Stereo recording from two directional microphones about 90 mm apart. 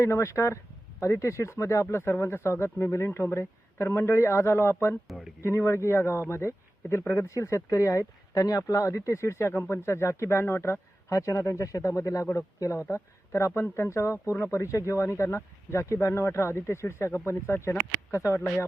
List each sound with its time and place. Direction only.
0.0 s speech: 30° left (ahead or behind)
5.0 s speech: centre (ahead or behind)
5.4 s a man's voice: 30° left (ahead or behind)